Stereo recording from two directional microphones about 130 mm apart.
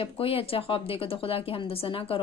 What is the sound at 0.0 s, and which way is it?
Speech, 45° left (ahead or behind).